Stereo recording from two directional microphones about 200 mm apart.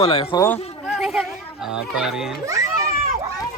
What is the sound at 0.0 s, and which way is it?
Speech, 25° left (ahead or behind).